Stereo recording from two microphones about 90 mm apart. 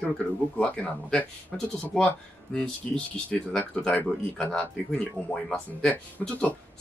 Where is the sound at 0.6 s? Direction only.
15° left (ahead or behind).